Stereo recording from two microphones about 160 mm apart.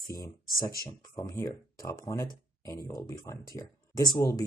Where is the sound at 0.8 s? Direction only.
25° left (ahead or behind).